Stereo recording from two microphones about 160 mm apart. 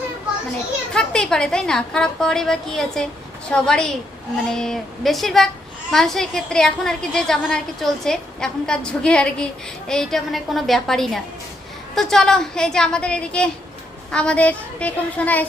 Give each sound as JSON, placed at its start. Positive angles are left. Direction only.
{"t": 0.9, "sound": "a woman's voice", "side_deg": 5}